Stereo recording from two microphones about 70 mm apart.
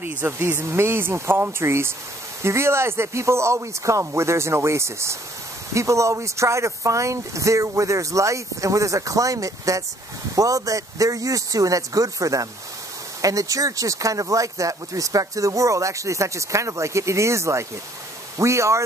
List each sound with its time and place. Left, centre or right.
0.0 s speech: right